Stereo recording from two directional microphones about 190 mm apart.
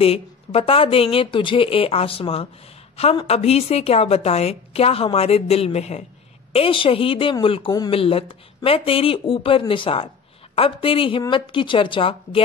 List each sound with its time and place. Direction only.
0.0 s a woman's voice: 30° left (ahead or behind)